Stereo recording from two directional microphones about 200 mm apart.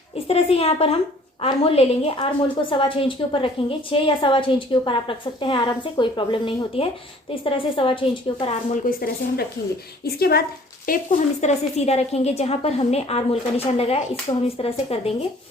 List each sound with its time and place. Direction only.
0.3 s a woman's voice: 30° left (ahead or behind)
8.8 s a woman's voice: 50° left (ahead or behind); by 15.1 s 30° left (ahead or behind)